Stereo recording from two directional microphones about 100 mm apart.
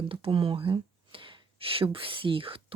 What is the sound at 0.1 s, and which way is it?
Speech, 70° right (ahead or behind).